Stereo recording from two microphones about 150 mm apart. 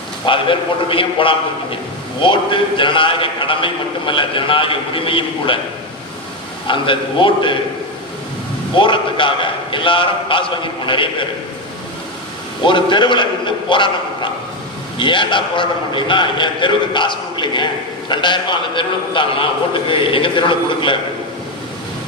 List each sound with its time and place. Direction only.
0.3 s a man's voice: 35° left (ahead or behind)
6.7 s a man's voice: 35° left (ahead or behind)
8.7 s a man's voice: 35° left (ahead or behind)
12.6 s a man's voice: 35° left (ahead or behind)